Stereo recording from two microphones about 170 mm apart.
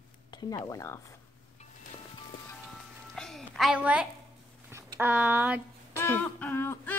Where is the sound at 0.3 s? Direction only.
25° left (ahead or behind).